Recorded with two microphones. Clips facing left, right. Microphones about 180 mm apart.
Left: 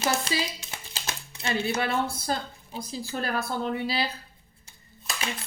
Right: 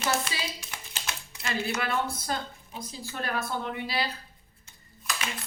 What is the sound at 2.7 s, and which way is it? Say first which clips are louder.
Speech: left 5 dB; 30° left (ahead or behind).